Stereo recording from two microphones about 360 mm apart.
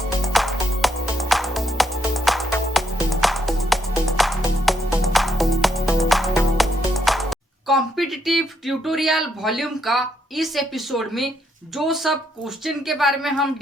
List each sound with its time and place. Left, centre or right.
0.3 s music: centre
11.8 s speech: centre